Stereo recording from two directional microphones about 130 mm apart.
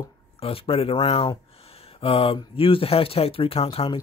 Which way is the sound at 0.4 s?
45° left (ahead or behind).